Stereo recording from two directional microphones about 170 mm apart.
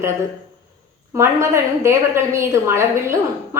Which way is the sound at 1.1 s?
15° right (ahead or behind).